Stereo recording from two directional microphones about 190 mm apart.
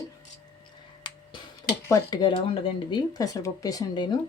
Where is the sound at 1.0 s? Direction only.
20° left (ahead or behind).